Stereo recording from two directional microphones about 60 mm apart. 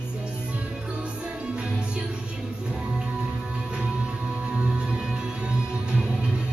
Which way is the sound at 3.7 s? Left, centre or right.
Centre.